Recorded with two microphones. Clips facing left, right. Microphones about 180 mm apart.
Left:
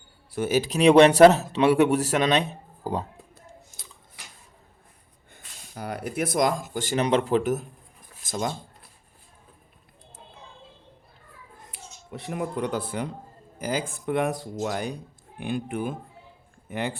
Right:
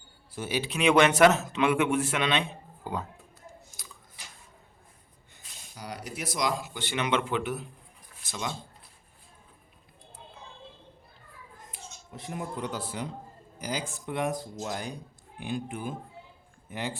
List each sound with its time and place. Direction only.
0.3 s a man's voice: 55° left (ahead or behind); by 3.1 s 35° left (ahead or behind)
5.3 s speech: 55° left (ahead or behind)
11.7 s speech: 70° left (ahead or behind)